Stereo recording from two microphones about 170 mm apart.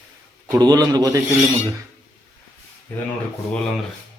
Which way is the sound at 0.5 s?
20° right (ahead or behind).